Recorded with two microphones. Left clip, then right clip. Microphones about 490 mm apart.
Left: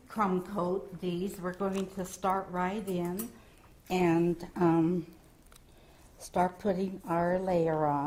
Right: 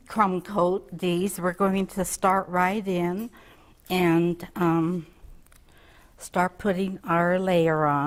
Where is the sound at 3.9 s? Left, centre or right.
Right.